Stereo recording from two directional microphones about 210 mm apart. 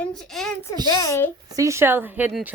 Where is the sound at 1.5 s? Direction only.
15° right (ahead or behind).